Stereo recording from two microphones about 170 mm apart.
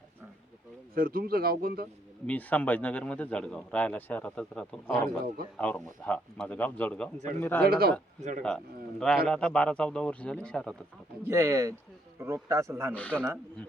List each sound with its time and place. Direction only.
0.9 s speech: 60° right (ahead or behind)
2.2 s a man's voice: 10° left (ahead or behind)
7.6 s speech: 60° right (ahead or behind)
8.4 s a man's voice: 5° left (ahead or behind)
11.3 s a man's voice: 15° right (ahead or behind)
12.9 s a man's voice: 10° left (ahead or behind)